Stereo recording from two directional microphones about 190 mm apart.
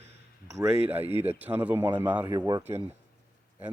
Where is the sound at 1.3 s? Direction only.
10° right (ahead or behind).